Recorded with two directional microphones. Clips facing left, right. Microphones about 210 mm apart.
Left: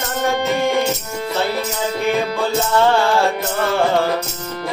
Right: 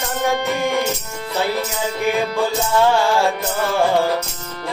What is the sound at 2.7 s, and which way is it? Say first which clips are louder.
Music: left 1 dB; 15° right (ahead or behind).